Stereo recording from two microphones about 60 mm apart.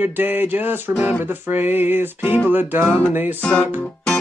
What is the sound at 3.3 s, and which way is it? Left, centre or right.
Music, left.